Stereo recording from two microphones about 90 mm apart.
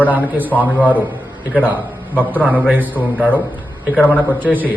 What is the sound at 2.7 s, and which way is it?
Speech, 20° right (ahead or behind).